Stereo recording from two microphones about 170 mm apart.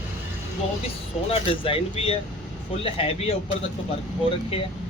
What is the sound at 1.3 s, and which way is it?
Speech, 35° left (ahead or behind).